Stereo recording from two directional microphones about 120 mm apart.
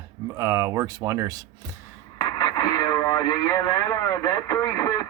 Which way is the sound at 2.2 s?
35° left (ahead or behind).